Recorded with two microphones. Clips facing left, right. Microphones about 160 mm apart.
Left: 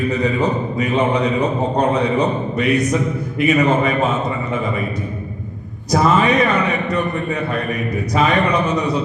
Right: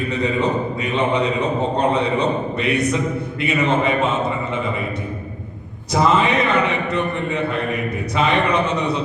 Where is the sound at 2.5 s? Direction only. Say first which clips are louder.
Left 3 dB; 30° right (ahead or behind).